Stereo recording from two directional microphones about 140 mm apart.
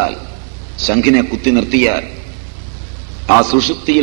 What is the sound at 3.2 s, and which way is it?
Speech, 30° left (ahead or behind).